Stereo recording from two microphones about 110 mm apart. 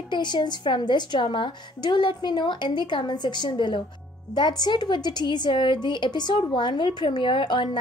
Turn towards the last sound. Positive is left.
turn(degrees=45)  # may be behind; listen again after turning